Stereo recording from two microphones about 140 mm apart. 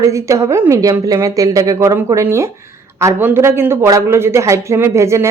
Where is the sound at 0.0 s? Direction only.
20° right (ahead or behind).